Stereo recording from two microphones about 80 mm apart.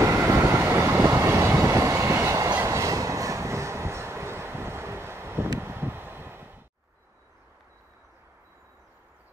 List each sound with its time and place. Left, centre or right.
0.2 s vehicle: right
2.6 s train: right
5.6 s vehicle: right